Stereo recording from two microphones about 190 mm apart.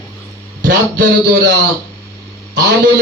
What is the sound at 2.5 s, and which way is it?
Music, 55° right (ahead or behind).